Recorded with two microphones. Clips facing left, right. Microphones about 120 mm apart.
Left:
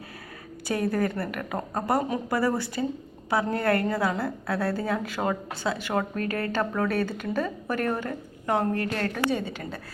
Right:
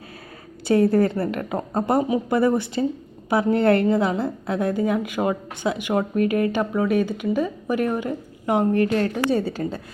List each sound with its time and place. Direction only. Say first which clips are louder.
0.7 s a woman's voice: right 8 dB; 25° right (ahead or behind)
9.3 s a woman's voice: right 7 dB; 35° right (ahead or behind)